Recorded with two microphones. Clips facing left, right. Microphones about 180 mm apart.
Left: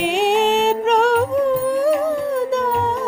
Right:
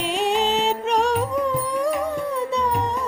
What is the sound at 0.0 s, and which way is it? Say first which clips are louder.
Music: left 5 dB; 70° left (ahead or behind).